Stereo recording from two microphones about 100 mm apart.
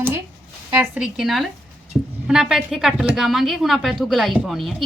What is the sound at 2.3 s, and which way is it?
A woman's voice, 5° right (ahead or behind).